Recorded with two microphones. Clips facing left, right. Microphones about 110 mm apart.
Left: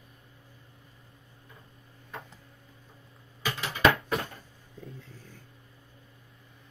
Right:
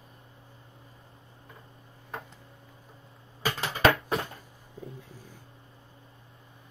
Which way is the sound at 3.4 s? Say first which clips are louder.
Right 1 dB; 40° right (ahead or behind).